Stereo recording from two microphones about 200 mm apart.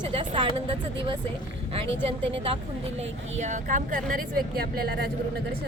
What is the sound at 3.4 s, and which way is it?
Speech, 40° right (ahead or behind).